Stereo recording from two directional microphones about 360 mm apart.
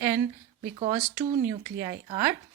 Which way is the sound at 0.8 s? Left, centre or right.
Centre.